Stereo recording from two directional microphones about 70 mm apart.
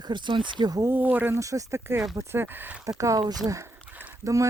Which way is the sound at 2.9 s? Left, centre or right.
Right.